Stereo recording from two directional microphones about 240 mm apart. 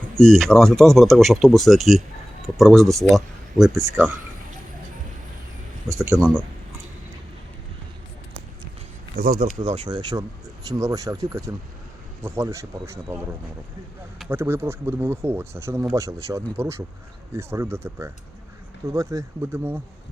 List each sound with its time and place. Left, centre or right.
0.2 s speech: centre
6.1 s speech: centre
9.1 s speech: right
9.6 s speech: right
14.3 s speech: centre